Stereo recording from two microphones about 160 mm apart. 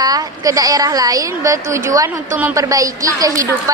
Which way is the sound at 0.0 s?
25° right (ahead or behind).